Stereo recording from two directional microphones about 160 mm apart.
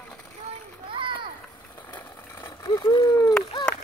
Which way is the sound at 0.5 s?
30° right (ahead or behind).